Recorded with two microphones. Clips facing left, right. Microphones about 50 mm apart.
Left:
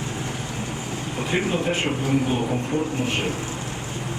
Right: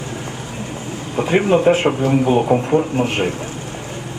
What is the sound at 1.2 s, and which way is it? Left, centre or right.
Speech, right.